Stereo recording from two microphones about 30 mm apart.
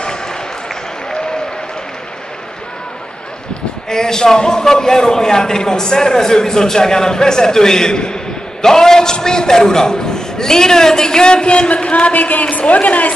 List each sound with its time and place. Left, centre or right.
0.0 s a sound: left
3.9 s a man's voice: left
12.1 s a woman's voice: left